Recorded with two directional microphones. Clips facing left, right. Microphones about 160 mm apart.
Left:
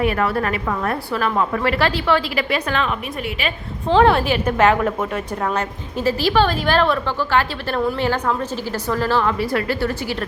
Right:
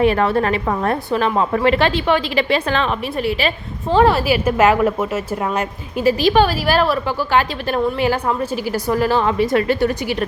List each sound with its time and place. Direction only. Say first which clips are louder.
0.0 s a woman's voice: right 4 dB; 30° right (ahead or behind)
3.8 s a woman's voice: right 1 dB; 5° right (ahead or behind)